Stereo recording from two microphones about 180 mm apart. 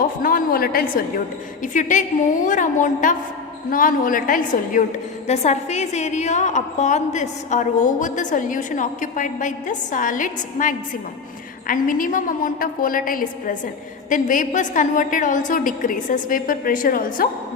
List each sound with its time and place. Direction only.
0.2 s a woman's voice: 50° left (ahead or behind)
5.3 s a woman's voice: 40° left (ahead or behind)